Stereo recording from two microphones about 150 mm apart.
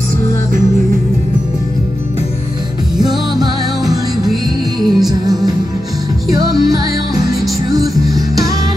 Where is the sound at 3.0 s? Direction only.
25° right (ahead or behind).